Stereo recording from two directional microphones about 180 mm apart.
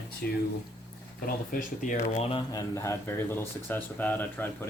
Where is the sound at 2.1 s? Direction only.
35° left (ahead or behind).